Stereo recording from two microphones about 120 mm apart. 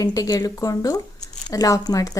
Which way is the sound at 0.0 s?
30° left (ahead or behind).